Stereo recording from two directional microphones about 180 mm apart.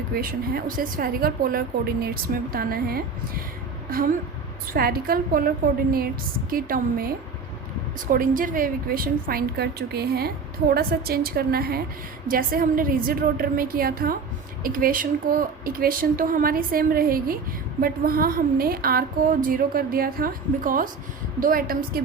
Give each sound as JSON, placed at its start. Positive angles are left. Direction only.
{"t": 0.1, "sound": "a woman's voice", "side_deg": -55}
{"t": 6.5, "sound": "a woman's voice", "side_deg": -55}